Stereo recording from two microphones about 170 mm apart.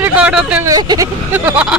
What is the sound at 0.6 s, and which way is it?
Speech, 20° right (ahead or behind).